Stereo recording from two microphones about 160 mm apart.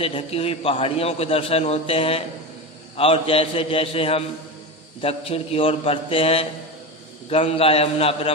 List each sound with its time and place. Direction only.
0.0 s a man's voice: 35° left (ahead or behind)